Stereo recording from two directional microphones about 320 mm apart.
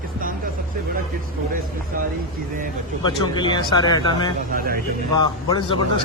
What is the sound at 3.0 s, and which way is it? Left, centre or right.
A man's voice, centre.